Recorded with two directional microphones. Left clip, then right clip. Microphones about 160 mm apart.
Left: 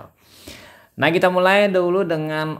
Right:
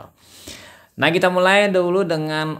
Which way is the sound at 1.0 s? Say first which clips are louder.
Even; centre (ahead or behind).